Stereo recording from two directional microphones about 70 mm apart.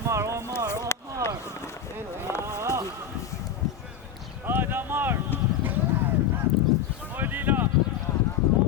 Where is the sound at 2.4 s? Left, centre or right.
Right.